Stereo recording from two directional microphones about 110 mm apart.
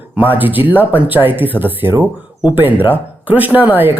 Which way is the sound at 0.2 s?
15° right (ahead or behind).